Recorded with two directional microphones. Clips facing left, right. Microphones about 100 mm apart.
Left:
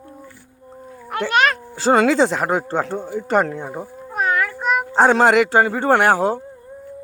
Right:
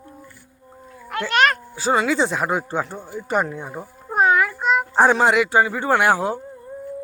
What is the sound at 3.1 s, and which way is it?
Speech, 65° left (ahead or behind).